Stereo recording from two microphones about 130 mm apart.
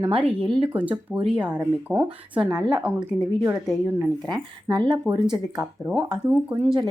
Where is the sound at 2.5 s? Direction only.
30° right (ahead or behind).